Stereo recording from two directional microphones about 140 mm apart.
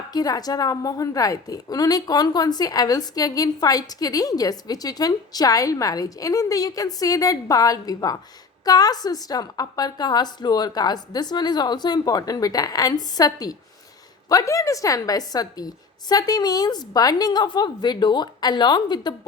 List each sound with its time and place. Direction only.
0.1 s a woman's voice: 30° left (ahead or behind)